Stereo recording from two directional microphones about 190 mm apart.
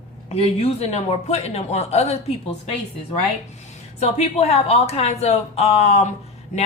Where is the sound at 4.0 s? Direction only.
35° left (ahead or behind).